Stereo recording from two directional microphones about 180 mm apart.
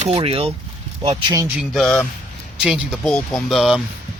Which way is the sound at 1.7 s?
Centre (ahead or behind).